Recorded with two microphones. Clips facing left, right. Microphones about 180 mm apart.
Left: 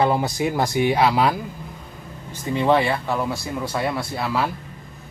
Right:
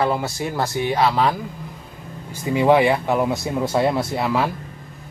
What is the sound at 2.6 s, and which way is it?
Speech, 15° right (ahead or behind).